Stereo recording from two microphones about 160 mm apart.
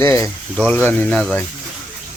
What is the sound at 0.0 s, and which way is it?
Speech, 15° left (ahead or behind).